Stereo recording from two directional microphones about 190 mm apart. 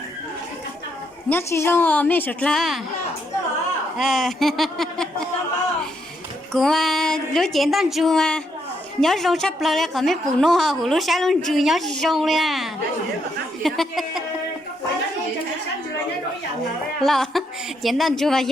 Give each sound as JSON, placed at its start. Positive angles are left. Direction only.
{"t": 1.3, "sound": "a woman's voice", "side_deg": 15}
{"t": 3.9, "sound": "a woman's voice", "side_deg": 0}
{"t": 6.5, "sound": "a woman's voice", "side_deg": 0}
{"t": 13.6, "sound": "a sound", "side_deg": 0}
{"t": 17.0, "sound": "a woman's voice", "side_deg": 0}